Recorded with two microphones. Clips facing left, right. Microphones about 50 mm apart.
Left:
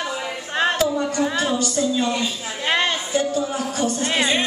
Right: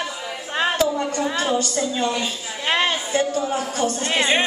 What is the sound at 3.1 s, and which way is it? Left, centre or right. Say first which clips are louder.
Speech: even; right.